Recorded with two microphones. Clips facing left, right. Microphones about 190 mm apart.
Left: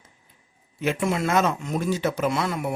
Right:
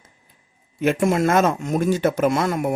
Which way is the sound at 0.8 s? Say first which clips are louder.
Right 6 dB; 50° right (ahead or behind).